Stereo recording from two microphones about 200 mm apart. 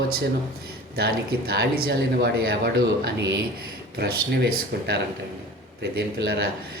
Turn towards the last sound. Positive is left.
turn(degrees=-50)  # may be behind; listen again after turning